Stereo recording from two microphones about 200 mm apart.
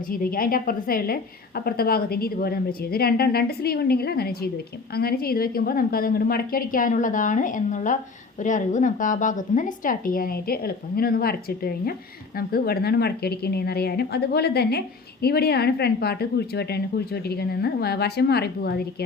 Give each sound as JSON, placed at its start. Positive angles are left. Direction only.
{"t": 0.1, "sound": "a woman's voice", "side_deg": 45}